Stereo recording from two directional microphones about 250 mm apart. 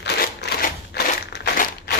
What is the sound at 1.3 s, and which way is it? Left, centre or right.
Crushing, left.